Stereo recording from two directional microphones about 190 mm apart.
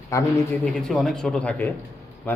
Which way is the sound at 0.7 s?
Centre (ahead or behind).